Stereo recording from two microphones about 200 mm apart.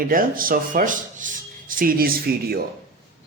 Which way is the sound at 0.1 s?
45° right (ahead or behind).